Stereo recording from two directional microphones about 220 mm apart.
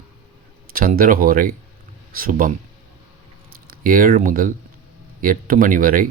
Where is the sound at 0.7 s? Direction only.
40° right (ahead or behind).